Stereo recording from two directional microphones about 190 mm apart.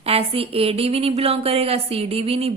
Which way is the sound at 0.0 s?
30° right (ahead or behind).